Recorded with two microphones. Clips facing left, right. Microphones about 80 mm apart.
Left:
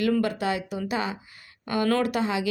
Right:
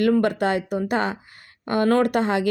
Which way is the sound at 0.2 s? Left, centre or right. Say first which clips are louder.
Right 5 dB; right.